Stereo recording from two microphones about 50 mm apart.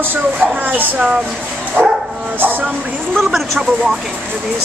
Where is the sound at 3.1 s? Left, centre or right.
Centre.